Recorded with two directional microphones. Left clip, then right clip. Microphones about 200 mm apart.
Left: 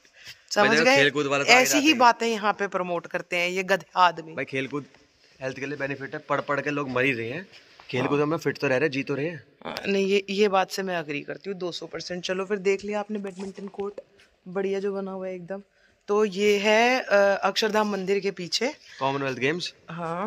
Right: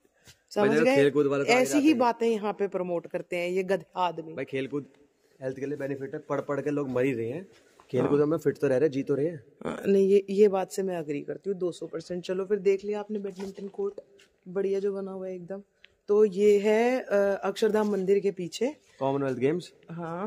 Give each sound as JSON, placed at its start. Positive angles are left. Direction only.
{"t": 0.6, "sound": "speech", "side_deg": 0}
{"t": 1.0, "sound": "a man's voice", "side_deg": -40}
{"t": 1.4, "sound": "a man's voice", "side_deg": -5}
{"t": 4.3, "sound": "speech", "side_deg": 25}
{"t": 5.4, "sound": "a man's voice", "side_deg": 0}
{"t": 8.1, "sound": "speech", "side_deg": 5}
{"t": 9.6, "sound": "speech", "side_deg": -60}
{"t": 9.9, "sound": "a man's voice", "side_deg": -15}
{"t": 12.4, "sound": "speech", "side_deg": 15}
{"t": 14.5, "sound": "a man's voice", "side_deg": 35}
{"t": 16.3, "sound": "a man's voice", "side_deg": -5}
{"t": 18.9, "sound": "speech", "side_deg": -45}
{"t": 20.0, "sound": "speech", "side_deg": 25}